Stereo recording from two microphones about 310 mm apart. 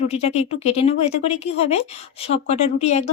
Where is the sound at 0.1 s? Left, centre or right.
Centre.